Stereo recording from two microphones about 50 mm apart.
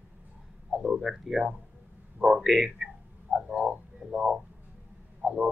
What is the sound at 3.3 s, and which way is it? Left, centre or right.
Frog, right.